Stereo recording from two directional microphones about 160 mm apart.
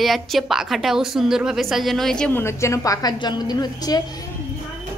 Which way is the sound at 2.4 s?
15° left (ahead or behind).